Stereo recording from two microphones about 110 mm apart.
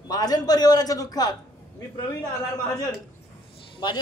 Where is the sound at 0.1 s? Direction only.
35° left (ahead or behind).